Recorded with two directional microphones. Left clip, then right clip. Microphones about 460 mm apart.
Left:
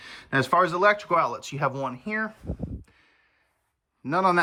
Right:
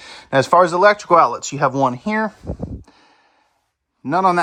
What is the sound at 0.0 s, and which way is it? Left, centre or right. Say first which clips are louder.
Speech: right 9 dB; centre.